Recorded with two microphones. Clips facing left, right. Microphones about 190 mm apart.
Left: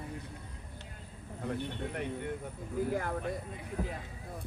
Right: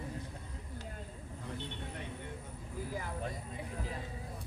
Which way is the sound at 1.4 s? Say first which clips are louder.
Left 8 dB; 55° left (ahead or behind).